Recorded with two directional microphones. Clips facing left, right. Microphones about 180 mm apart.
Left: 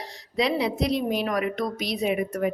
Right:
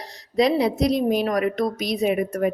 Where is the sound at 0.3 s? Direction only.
40° right (ahead or behind).